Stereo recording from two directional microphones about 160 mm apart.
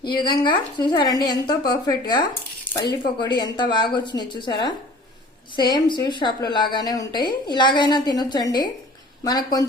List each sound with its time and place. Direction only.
0.1 s a woman's voice: 30° left (ahead or behind)